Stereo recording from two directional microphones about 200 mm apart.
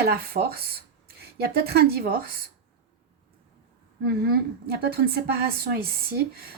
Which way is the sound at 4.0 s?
50° right (ahead or behind).